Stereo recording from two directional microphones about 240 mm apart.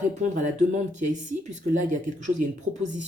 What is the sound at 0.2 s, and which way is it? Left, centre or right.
Speech, right.